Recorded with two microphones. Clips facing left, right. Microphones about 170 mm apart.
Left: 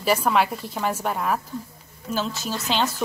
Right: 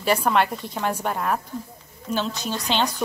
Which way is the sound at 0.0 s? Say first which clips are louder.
Even; 5° left (ahead or behind).